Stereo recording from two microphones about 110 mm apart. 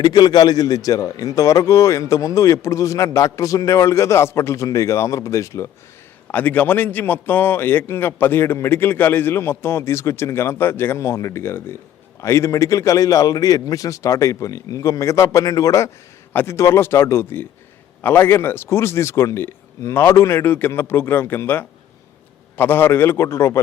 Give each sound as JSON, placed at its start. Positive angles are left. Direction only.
{"t": 0.0, "sound": "a man's voice", "side_deg": 40}
{"t": 6.2, "sound": "a man's voice", "side_deg": 15}